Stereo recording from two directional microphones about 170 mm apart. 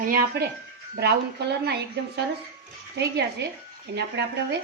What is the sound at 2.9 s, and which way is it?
Speech, 80° right.